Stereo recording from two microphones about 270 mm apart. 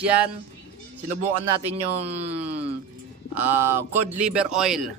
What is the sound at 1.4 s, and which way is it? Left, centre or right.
Speech, right.